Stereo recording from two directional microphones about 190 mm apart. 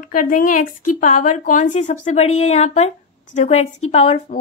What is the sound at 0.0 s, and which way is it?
A woman's voice, 45° left (ahead or behind).